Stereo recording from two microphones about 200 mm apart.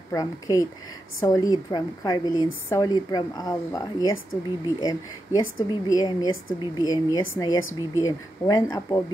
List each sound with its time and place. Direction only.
0.1 s a woman's voice: 15° left (ahead or behind)